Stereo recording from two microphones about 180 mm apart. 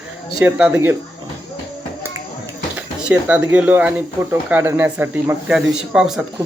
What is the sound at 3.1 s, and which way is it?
Speech, 10° right (ahead or behind).